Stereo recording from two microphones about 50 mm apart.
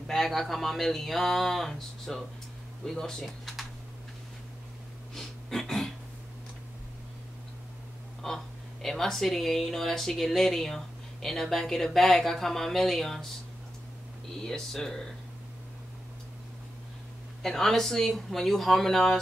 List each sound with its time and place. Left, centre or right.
0.0 s speech: centre
5.1 s a sound: centre
8.2 s a sound: centre
8.8 s speech: centre
14.7 s speech: centre
17.4 s speech: centre